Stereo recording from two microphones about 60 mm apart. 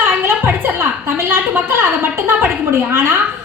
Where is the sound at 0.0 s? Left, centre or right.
Right.